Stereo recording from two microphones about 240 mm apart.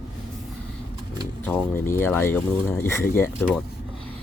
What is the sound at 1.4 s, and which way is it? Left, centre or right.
Speech, centre.